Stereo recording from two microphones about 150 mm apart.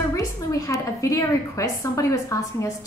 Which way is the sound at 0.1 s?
20° left (ahead or behind).